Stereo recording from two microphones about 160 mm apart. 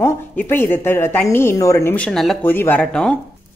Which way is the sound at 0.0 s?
15° left (ahead or behind).